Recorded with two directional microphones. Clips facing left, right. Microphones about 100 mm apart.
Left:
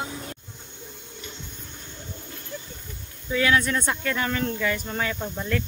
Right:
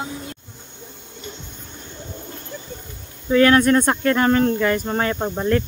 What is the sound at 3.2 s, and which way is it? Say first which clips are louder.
Speech: right 9 dB; 55° right (ahead or behind).